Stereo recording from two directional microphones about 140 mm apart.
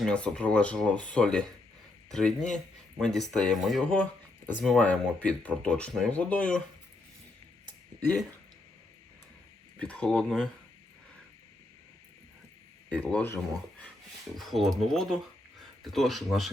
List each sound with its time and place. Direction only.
0.0 s speech: 10° left (ahead or behind)
9.7 s speech: 10° left (ahead or behind)
12.9 s speech: 10° left (ahead or behind)
14.3 s speech: centre (ahead or behind)